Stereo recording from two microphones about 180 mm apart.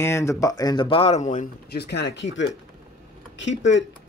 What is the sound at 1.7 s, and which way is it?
Speech, 65° left (ahead or behind).